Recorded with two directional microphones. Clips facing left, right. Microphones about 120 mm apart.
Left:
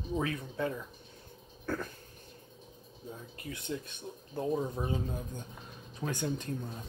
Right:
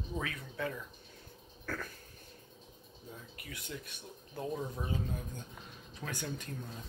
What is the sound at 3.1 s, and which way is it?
Speech, 25° left (ahead or behind).